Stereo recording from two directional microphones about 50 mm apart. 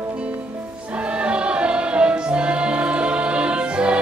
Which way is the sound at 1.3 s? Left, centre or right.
Right.